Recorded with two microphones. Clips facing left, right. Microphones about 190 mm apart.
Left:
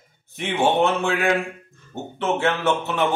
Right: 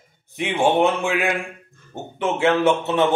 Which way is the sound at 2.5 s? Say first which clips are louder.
Right 4 dB; 20° right (ahead or behind).